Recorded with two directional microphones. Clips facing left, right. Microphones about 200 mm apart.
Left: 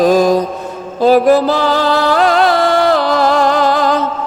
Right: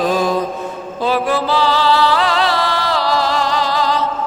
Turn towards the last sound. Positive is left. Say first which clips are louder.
# left 5 dB
turn(degrees=50)  # may be behind; listen again after turning